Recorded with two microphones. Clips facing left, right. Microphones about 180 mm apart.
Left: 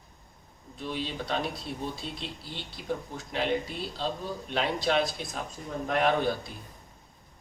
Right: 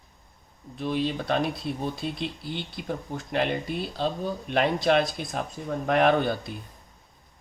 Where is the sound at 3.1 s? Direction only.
55° right (ahead or behind).